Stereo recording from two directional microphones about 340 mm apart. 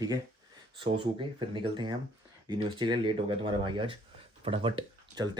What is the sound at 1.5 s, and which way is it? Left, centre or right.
Speech, centre.